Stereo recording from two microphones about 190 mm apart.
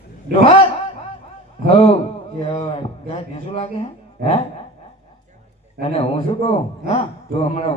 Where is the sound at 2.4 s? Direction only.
30° left (ahead or behind).